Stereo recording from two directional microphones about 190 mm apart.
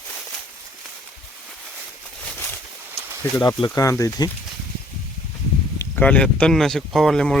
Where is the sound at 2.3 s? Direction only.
10° left (ahead or behind).